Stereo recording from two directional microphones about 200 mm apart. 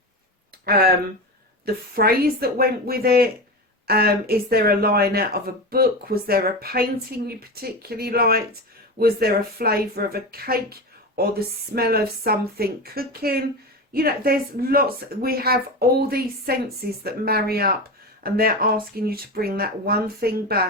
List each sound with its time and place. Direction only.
0.6 s speech: 50° right (ahead or behind)